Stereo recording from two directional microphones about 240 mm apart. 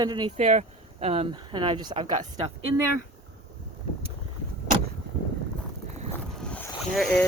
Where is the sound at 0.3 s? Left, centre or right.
Right.